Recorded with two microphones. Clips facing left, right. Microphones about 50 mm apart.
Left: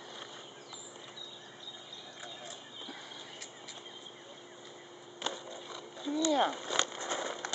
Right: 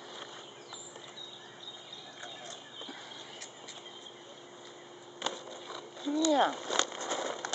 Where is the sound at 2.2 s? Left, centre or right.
Centre.